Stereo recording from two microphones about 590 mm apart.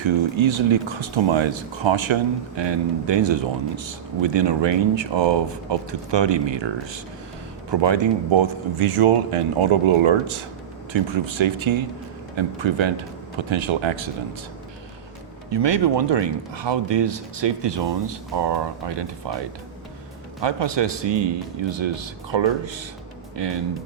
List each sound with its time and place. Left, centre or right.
0.0 s speech: right
15.4 s speech: right
20.4 s speech: right